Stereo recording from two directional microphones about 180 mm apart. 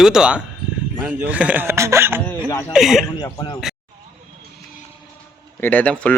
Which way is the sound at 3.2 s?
25° left (ahead or behind).